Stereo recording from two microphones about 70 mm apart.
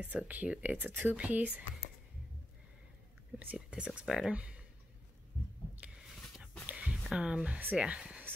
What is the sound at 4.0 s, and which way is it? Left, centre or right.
Speech, centre.